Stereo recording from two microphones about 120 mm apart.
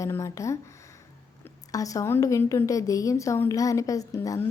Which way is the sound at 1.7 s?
30° left (ahead or behind).